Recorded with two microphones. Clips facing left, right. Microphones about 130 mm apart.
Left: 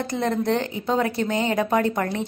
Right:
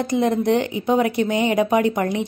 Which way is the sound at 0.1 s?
15° right (ahead or behind).